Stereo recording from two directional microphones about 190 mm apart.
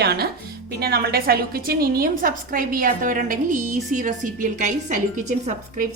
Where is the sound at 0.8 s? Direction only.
55° right (ahead or behind).